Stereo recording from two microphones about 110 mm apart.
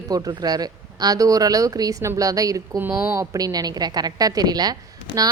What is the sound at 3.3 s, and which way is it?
Speech, 35° right (ahead or behind).